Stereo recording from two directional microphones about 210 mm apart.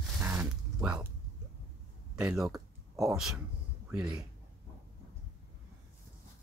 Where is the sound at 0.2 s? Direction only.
10° right (ahead or behind).